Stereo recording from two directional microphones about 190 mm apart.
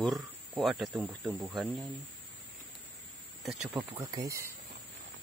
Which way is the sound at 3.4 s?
Centre (ahead or behind).